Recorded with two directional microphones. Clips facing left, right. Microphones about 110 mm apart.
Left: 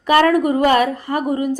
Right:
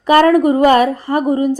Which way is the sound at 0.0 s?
30° right (ahead or behind).